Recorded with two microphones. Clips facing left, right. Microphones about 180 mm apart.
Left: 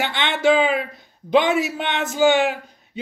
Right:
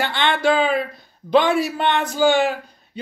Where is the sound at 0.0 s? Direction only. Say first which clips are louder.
Even; 20° left (ahead or behind).